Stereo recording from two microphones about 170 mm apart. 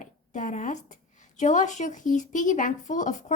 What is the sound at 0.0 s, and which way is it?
A woman's voice, 50° left (ahead or behind).